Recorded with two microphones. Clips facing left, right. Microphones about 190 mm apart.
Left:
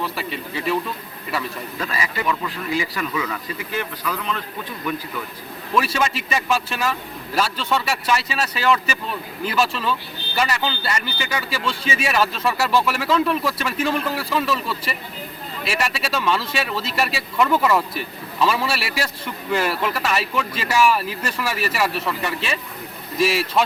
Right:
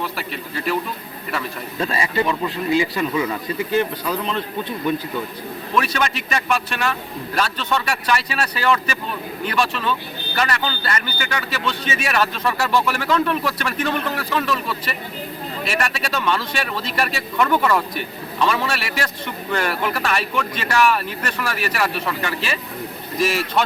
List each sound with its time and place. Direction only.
0.0 s speech: centre (ahead or behind)
1.8 s a man's voice: 30° right (ahead or behind)
5.7 s speech: 5° left (ahead or behind)
15.6 s speech: 5° left (ahead or behind)